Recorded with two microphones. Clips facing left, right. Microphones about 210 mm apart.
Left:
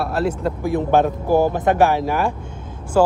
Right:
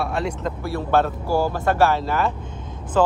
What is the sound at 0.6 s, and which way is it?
Speech, 15° left (ahead or behind).